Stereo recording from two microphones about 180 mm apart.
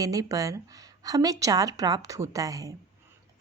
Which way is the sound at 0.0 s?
20° right (ahead or behind).